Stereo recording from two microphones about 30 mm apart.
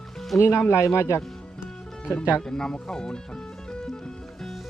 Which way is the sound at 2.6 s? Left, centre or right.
Left.